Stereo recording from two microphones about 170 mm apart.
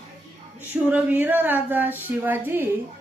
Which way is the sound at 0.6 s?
10° right (ahead or behind).